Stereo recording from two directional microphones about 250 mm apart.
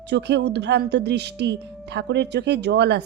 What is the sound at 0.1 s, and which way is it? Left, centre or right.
A woman's voice, right.